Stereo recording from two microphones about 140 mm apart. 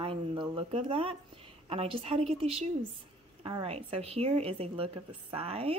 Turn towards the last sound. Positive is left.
turn(degrees=-45)  # may be behind; listen again after turning